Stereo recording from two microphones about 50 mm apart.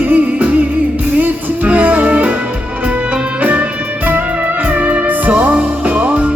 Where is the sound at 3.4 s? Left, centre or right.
Right.